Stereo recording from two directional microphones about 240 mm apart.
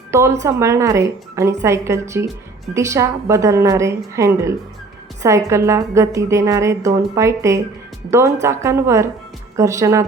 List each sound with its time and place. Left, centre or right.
0.1 s a woman's voice: centre